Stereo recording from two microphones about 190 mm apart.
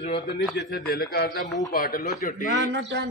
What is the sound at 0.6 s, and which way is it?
A man's voice, 55° left (ahead or behind).